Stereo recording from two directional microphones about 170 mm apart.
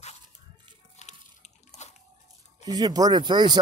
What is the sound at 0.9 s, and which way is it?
Bathtub, 40° left (ahead or behind).